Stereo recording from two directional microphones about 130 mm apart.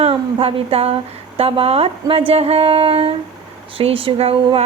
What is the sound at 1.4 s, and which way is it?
Speech, 50° right (ahead or behind).